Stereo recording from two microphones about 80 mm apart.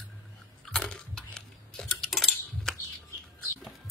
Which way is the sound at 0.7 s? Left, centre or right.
Centre.